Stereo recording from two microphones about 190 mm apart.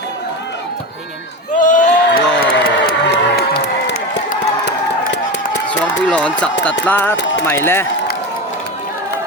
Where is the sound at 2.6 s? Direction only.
55° left (ahead or behind).